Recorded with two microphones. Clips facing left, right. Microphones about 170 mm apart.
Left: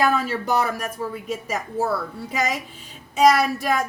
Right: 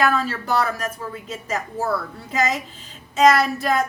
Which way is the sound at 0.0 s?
15° left (ahead or behind).